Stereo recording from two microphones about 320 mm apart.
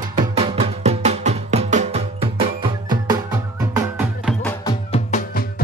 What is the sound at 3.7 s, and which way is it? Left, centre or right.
Music, centre.